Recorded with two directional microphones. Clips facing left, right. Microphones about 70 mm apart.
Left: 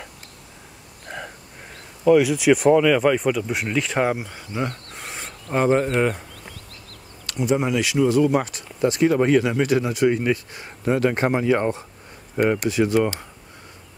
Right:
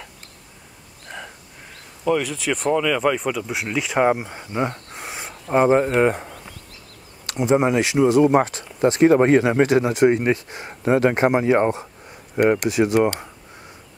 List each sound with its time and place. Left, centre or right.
2.0 s speech: centre; by 6.2 s right
7.2 s speech: right